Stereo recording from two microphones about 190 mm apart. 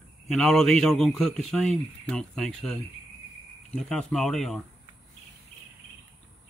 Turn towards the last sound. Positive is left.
turn(degrees=0)  # may be behind; listen again after turning